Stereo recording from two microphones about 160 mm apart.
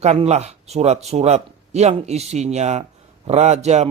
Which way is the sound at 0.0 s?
40° right (ahead or behind).